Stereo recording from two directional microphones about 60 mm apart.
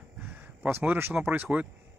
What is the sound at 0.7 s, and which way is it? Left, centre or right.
Speech, right.